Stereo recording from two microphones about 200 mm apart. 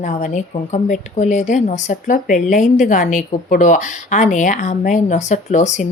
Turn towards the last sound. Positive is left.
turn(degrees=35)  # may be behind; listen again after turning